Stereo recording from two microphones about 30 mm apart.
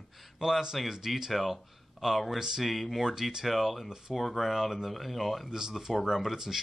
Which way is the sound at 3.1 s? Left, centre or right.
Centre.